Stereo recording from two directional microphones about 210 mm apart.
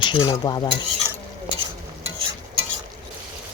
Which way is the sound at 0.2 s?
20° left (ahead or behind).